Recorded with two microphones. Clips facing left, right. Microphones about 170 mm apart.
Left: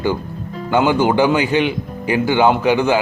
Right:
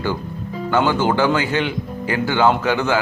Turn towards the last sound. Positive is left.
turn(degrees=15)  # may be behind; listen again after turning